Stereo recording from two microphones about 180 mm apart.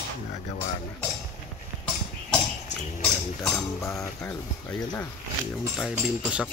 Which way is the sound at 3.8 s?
15° left (ahead or behind).